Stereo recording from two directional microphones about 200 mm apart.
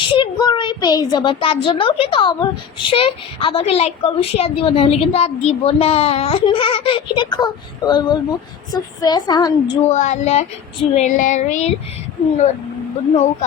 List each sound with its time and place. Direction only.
0.0 s a child's voice: 25° left (ahead or behind)
9.8 s speech: 35° left (ahead or behind)